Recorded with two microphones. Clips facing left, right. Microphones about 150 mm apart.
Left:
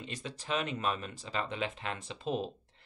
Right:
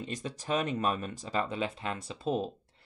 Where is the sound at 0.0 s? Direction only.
45° right (ahead or behind).